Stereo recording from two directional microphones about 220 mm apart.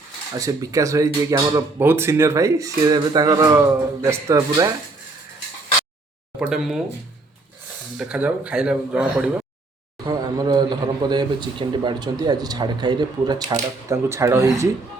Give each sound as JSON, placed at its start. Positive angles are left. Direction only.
{"t": 0.3, "sound": "speech", "side_deg": -15}
{"t": 6.4, "sound": "speech", "side_deg": -5}
{"t": 7.9, "sound": "speech", "side_deg": -5}
{"t": 10.1, "sound": "speech", "side_deg": -15}